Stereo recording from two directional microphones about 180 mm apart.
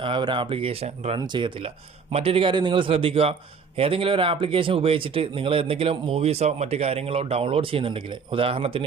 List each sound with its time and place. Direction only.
0.0 s a man's voice: 25° right (ahead or behind)